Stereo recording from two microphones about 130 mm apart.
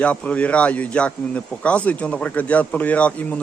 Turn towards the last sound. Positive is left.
turn(degrees=10)  # may be behind; listen again after turning